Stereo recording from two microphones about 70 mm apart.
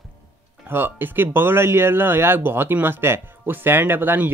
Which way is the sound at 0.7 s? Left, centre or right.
Right.